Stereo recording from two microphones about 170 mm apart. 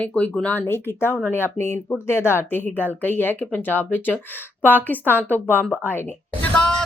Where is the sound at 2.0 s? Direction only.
15° left (ahead or behind).